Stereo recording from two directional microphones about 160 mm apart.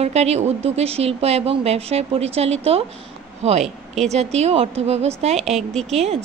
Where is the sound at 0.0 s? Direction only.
40° right (ahead or behind).